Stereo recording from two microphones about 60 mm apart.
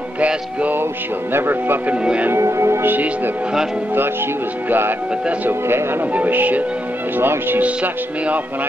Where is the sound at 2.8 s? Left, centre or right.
Right.